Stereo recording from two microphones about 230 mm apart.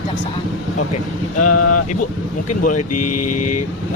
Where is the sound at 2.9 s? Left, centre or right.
Left.